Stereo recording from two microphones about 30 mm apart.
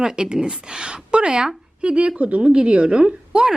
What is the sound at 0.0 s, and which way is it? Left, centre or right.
Speech, right.